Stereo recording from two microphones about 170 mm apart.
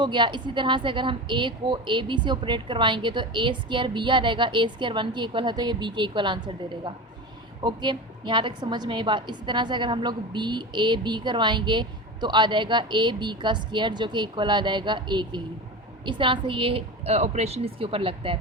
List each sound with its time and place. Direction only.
0.0 s a woman's voice: 25° right (ahead or behind)